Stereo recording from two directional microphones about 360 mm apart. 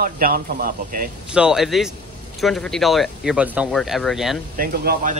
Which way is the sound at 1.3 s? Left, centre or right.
Centre.